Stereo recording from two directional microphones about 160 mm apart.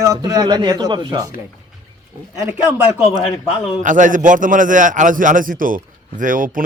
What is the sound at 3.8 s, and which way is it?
Speech, 55° right (ahead or behind).